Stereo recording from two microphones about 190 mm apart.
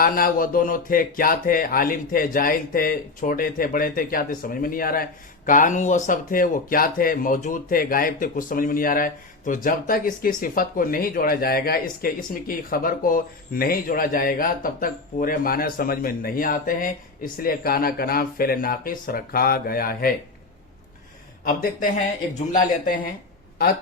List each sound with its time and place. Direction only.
0.0 s speech: 50° left (ahead or behind)
21.4 s speech: 50° left (ahead or behind)